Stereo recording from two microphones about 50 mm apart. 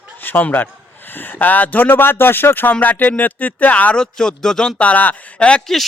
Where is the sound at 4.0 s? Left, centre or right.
Centre; by 5.2 s left.